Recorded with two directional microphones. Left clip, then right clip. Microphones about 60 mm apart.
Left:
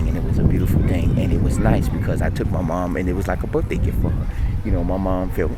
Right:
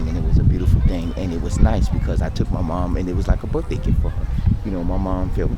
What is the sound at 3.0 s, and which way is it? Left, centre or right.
Speech, left.